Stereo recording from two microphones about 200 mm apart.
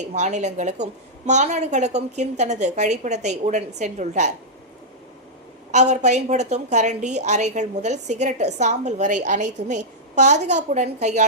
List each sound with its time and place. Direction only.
0.0 s a woman's voice: 35° right (ahead or behind)
5.7 s a woman's voice: 35° right (ahead or behind)